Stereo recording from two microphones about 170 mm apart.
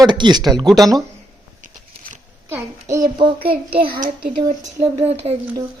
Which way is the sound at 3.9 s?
60° right (ahead or behind).